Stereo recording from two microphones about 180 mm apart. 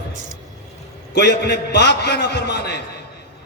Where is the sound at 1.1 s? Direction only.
75° left (ahead or behind).